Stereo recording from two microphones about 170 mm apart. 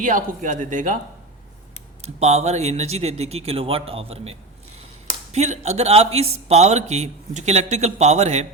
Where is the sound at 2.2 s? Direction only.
40° right (ahead or behind).